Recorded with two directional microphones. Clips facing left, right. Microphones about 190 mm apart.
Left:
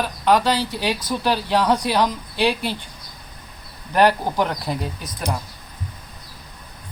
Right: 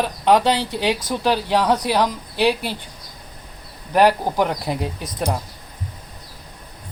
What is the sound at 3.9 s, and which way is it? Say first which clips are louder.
Speech: right 1 dB; 5° right (ahead or behind).